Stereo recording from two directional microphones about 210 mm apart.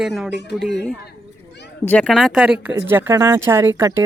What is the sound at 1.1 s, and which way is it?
Children playing, 55° left (ahead or behind).